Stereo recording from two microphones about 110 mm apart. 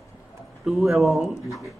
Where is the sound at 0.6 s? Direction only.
Centre (ahead or behind).